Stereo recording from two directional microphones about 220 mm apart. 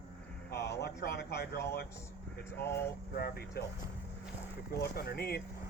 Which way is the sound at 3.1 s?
45° left (ahead or behind).